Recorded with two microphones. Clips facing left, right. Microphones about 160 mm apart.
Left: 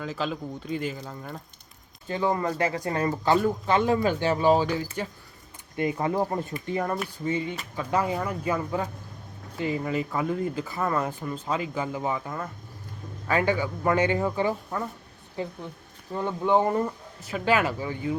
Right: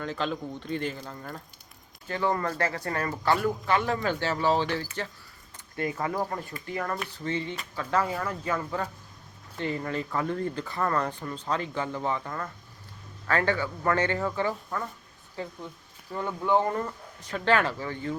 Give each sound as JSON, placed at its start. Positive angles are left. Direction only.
{"t": 0.0, "sound": "speech", "side_deg": 5}
{"t": 6.9, "sound": "speech", "side_deg": 10}